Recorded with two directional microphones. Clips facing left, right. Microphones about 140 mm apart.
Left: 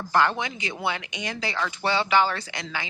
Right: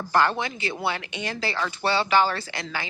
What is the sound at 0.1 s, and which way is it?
Speech, 20° left (ahead or behind).